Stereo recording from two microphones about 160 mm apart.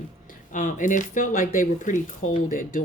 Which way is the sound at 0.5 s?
55° left (ahead or behind).